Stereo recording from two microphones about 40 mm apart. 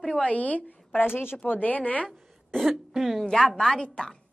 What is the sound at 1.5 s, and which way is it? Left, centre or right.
Speech, left.